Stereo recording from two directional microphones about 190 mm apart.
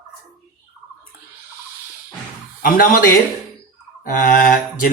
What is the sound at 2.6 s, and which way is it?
Speech, 50° left (ahead or behind).